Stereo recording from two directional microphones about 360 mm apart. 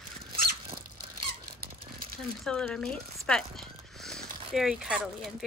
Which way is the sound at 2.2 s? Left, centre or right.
Centre.